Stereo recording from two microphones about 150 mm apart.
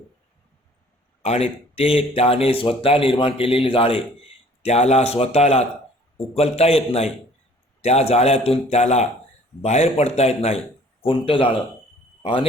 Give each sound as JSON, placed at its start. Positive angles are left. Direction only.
{"t": 1.2, "sound": "a man's voice", "side_deg": 45}